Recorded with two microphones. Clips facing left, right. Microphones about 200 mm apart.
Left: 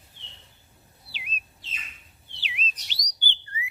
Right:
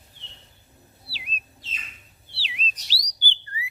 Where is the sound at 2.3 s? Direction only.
35° right (ahead or behind).